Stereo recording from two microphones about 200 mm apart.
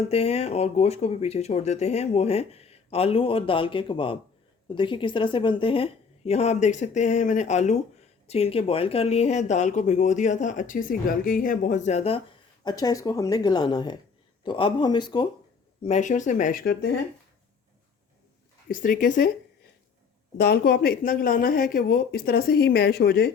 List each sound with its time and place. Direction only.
0.1 s speech: 30° left (ahead or behind)
12.6 s speech: 20° left (ahead or behind)
15.8 s speech: 35° left (ahead or behind)
18.7 s speech: 40° left (ahead or behind)
20.4 s speech: 55° left (ahead or behind)